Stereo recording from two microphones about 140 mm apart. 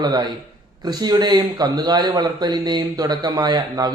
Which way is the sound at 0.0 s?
30° right (ahead or behind).